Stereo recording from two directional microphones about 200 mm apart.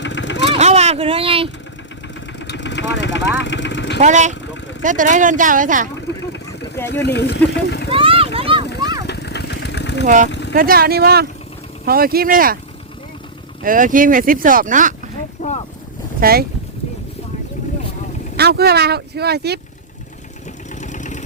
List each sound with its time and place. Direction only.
0.0 s vehicle: 65° left (ahead or behind)
0.5 s vehicle: 30° right (ahead or behind)
2.4 s speech: 65° left (ahead or behind)
4.0 s speech: 35° right (ahead or behind)
7.0 s speech: 55° left (ahead or behind)
7.9 s vehicle: 25° right (ahead or behind)
9.0 s vehicle: 55° left (ahead or behind)
10.5 s speech: 45° right (ahead or behind)
13.6 s speech: 40° right (ahead or behind)
15.4 s speech: 35° left (ahead or behind)
16.2 s speech: 50° right (ahead or behind)
18.3 s speech: 55° right (ahead or behind)
20.8 s vehicle: 35° left (ahead or behind)